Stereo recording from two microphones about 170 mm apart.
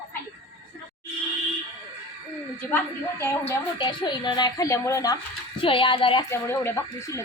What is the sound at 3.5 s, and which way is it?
A woman's voice, 25° left (ahead or behind).